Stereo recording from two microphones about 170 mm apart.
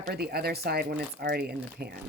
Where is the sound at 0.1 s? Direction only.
70° right (ahead or behind).